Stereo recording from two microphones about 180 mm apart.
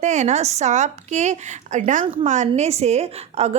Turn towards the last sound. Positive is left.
turn(degrees=-35)  # may be behind; listen again after turning